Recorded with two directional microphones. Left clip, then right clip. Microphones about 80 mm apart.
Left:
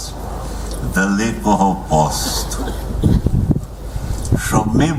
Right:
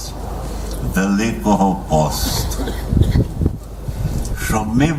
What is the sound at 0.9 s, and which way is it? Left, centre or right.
Mantra, centre.